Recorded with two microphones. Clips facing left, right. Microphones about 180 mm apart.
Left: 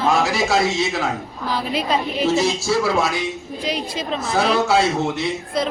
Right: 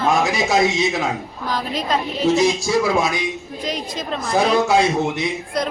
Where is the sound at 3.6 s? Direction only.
10° left (ahead or behind).